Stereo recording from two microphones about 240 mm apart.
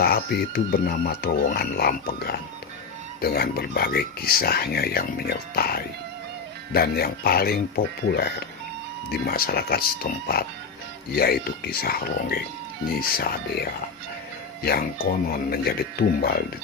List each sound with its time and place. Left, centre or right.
0.0 s speech: left
9.0 s speech: left